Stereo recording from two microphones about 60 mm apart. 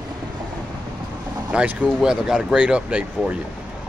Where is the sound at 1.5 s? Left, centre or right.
Centre.